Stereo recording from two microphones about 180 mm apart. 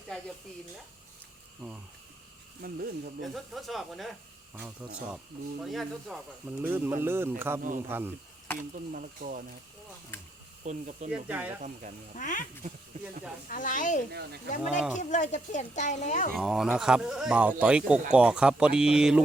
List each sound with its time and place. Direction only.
0.1 s speech: 5° left (ahead or behind)
2.6 s speech: 55° right (ahead or behind)
3.3 s speech: centre (ahead or behind)
6.6 s speech: 10° right (ahead or behind)
8.7 s speech: 50° right (ahead or behind)
10.6 s speech: 40° right (ahead or behind)
11.1 s speech: 10° right (ahead or behind)
11.6 s speech: 45° right (ahead or behind)
12.1 s speech: 45° left (ahead or behind)
13.5 s speech: 45° left (ahead or behind)
14.6 s speech: 5° right (ahead or behind)
15.1 s speech: 45° left (ahead or behind)
16.3 s speech: centre (ahead or behind)